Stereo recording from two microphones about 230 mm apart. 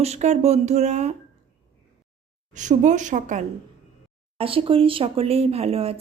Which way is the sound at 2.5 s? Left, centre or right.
Right.